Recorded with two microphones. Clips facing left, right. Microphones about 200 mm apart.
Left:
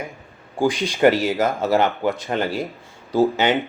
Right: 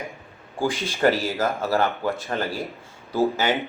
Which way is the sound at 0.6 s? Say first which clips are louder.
Left 5 dB; 15° left (ahead or behind).